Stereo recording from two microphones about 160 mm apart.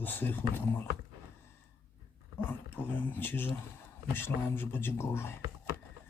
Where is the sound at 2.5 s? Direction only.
10° left (ahead or behind).